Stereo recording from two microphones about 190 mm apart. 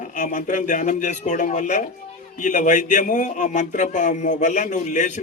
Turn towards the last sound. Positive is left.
turn(degrees=40)  # may be behind; listen again after turning